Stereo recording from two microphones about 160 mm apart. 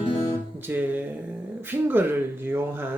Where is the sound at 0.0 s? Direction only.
30° left (ahead or behind).